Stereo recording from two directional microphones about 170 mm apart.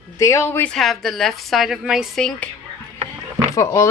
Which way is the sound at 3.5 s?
20° left (ahead or behind).